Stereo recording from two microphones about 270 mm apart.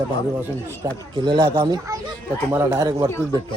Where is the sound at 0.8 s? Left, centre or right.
Centre.